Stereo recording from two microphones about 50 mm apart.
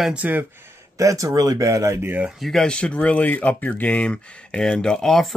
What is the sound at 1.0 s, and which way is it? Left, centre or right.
Speech, right.